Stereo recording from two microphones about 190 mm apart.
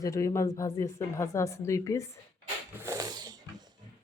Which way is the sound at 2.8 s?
15° right (ahead or behind).